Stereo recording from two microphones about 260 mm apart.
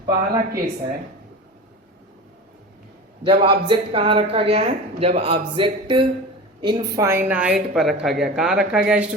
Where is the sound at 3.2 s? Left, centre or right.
Centre.